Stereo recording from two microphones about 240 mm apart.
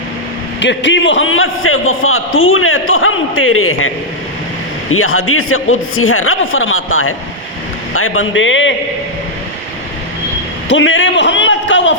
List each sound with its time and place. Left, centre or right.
0.6 s a man's voice: left
10.7 s a man's voice: left